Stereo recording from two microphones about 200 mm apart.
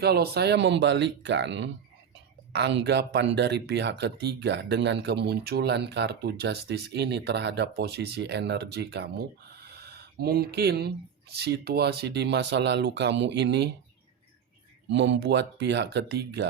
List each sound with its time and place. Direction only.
0.0 s speech: 55° right (ahead or behind)
14.8 s speech: 60° right (ahead or behind)